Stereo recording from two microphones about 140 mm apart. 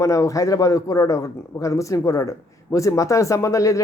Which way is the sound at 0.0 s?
20° left (ahead or behind).